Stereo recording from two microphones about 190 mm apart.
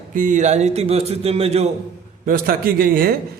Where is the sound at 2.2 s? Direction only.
50° right (ahead or behind).